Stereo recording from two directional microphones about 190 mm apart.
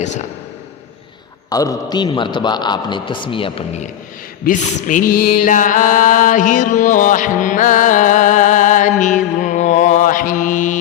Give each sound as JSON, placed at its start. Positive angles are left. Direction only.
{"t": 0.0, "sound": "speech", "side_deg": 40}
{"t": 1.5, "sound": "a man's voice", "side_deg": 20}
{"t": 4.4, "sound": "mantra", "side_deg": 40}